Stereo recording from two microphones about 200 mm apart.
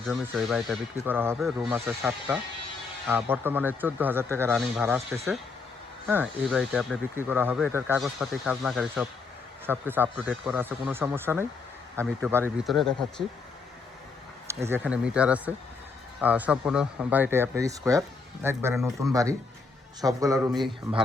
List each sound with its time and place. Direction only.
0.0 s speech: centre (ahead or behind)
6.6 s speech: centre (ahead or behind)
7.2 s speech: 10° right (ahead or behind)
7.9 s speech: centre (ahead or behind)
12.5 s speech: centre (ahead or behind)
14.4 s speech: 10° right (ahead or behind)